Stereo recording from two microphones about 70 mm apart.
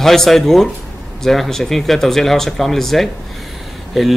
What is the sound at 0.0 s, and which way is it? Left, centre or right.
Speech, centre.